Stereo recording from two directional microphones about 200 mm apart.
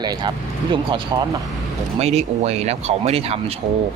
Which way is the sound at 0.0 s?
20° right (ahead or behind).